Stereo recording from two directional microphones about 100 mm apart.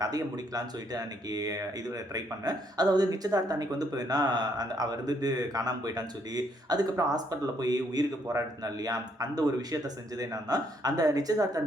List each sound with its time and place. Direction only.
0.0 s speech: 40° right (ahead or behind)